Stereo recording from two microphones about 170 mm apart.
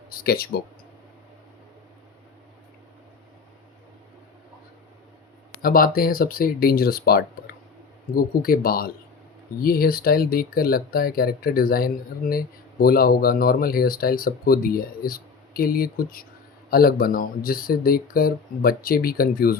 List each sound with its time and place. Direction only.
0.1 s speech: 60° left (ahead or behind)
5.6 s speech: 60° left (ahead or behind)